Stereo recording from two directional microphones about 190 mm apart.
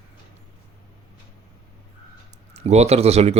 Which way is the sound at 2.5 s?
35° right (ahead or behind).